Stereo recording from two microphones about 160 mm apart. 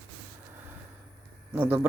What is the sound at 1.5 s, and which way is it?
Speech, 10° right (ahead or behind).